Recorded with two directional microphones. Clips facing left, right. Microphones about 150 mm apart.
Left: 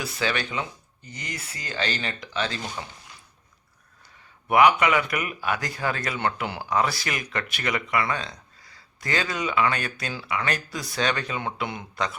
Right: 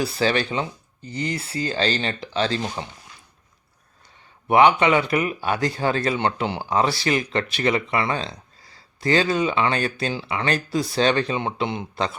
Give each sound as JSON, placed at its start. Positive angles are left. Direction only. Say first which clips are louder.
{"t": 0.0, "sound": "speech", "louder": "right 6 dB", "side_deg": -30}
{"t": 4.4, "sound": "speech", "louder": "right 3 dB", "side_deg": -30}